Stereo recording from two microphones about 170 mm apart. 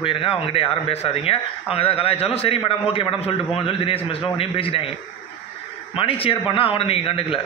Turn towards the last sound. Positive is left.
turn(degrees=35)  # may be behind; listen again after turning